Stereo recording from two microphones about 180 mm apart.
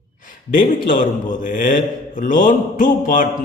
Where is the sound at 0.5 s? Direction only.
50° left (ahead or behind).